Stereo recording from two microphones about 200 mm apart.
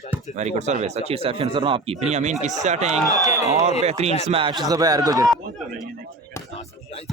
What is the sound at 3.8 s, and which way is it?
A man's voice, 35° right (ahead or behind).